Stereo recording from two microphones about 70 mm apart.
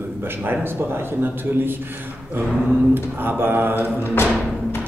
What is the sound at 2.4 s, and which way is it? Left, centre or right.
Mantra, right.